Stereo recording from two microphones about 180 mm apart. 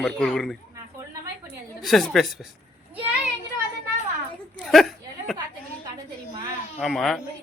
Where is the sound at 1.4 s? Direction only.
Centre (ahead or behind).